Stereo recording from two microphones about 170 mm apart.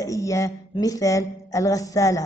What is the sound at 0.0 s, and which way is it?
Speech, 20° left (ahead or behind).